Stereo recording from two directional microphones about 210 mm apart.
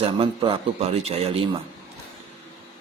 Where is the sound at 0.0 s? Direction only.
25° right (ahead or behind).